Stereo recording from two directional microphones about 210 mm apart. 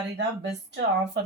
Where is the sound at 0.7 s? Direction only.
55° right (ahead or behind).